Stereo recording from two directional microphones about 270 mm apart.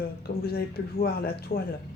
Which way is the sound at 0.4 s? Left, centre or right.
Left.